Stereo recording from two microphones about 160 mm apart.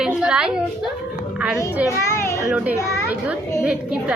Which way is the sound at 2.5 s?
10° right (ahead or behind).